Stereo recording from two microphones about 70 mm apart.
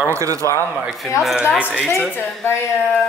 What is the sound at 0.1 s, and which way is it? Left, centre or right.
Speech, right.